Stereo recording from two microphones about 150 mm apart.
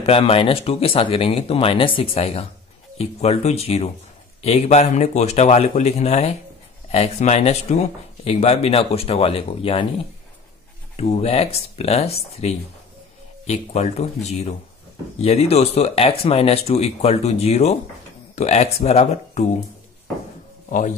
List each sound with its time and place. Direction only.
0.0 s speech: 40° left (ahead or behind)
11.0 s speech: 45° left (ahead or behind)